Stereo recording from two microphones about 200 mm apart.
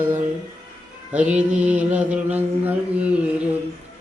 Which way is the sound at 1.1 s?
5° right (ahead or behind).